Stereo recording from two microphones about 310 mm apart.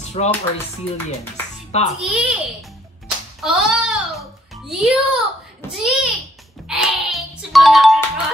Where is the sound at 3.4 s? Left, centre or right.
Centre.